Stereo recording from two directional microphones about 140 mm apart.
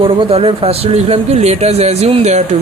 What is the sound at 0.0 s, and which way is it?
Speech, 40° right (ahead or behind).